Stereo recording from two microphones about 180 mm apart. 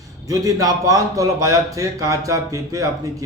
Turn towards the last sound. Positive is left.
turn(degrees=-20)  # may be behind; listen again after turning